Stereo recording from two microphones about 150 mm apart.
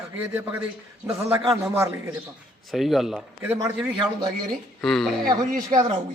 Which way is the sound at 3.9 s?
30° right (ahead or behind).